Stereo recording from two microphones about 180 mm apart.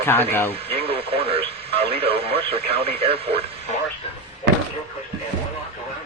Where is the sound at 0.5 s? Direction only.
30° right (ahead or behind).